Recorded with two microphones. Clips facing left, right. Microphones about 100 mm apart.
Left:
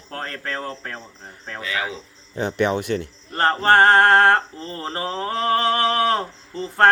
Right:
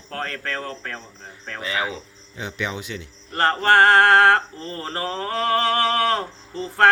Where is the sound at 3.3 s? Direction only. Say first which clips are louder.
Left 1 dB; 25° left (ahead or behind).